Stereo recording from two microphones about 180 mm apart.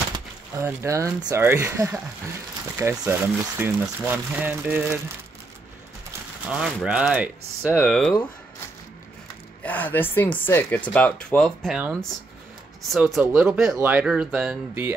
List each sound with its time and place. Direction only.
0.1 s speech: 15° right (ahead or behind)
6.5 s speech: 5° right (ahead or behind)
7.8 s speech: 5° left (ahead or behind)
9.6 s speech: 10° left (ahead or behind)
12.9 s speech: 5° right (ahead or behind)